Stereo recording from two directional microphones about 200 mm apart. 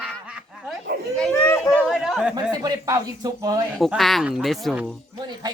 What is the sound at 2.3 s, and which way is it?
Speech, 20° right (ahead or behind).